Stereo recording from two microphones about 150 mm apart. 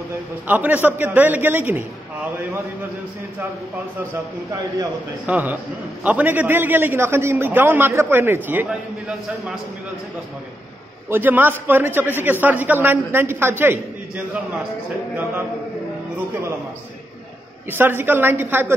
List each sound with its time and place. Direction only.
0.5 s a man's voice: 10° right (ahead or behind)
5.2 s a man's voice: 10° right (ahead or behind)
11.1 s a man's voice: 15° right (ahead or behind)
17.6 s a man's voice: 15° right (ahead or behind)